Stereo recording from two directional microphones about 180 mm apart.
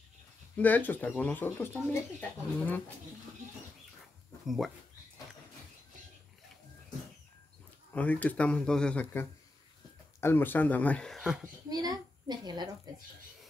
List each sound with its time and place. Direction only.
0.6 s speech: 10° left (ahead or behind)
7.9 s speech: 10° left (ahead or behind)
11.7 s a child's voice: 20° right (ahead or behind)